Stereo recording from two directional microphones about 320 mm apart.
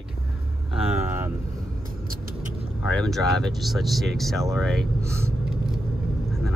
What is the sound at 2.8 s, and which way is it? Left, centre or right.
Speech, centre.